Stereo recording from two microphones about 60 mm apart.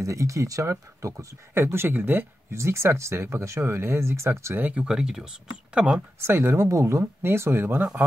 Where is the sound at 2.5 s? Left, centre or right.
Right.